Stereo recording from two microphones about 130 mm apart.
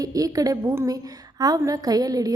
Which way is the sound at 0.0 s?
25° right (ahead or behind).